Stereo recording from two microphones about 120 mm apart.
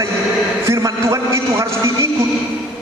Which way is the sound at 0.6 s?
25° right (ahead or behind).